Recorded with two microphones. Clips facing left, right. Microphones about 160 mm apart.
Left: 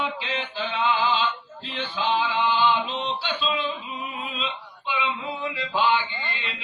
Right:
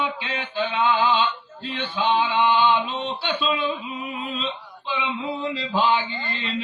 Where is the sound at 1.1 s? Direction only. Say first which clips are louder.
Right 3 dB; 55° right (ahead or behind).